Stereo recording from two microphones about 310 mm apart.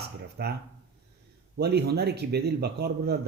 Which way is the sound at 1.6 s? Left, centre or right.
Right.